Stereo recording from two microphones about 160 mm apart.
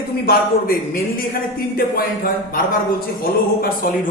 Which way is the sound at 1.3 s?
70° left (ahead or behind).